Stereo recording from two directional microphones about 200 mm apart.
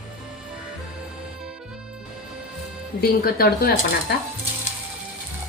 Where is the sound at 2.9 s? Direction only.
50° left (ahead or behind).